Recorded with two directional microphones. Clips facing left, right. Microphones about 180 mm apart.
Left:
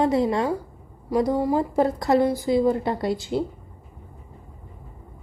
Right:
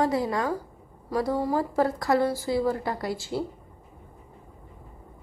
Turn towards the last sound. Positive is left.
turn(degrees=20)  # may be behind; listen again after turning